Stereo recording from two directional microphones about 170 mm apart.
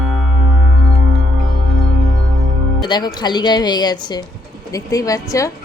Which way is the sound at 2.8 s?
25° left (ahead or behind).